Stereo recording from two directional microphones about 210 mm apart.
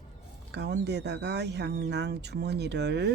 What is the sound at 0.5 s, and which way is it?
Speech, 55° right (ahead or behind).